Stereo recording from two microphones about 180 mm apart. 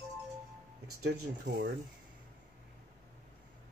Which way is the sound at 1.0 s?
65° right (ahead or behind).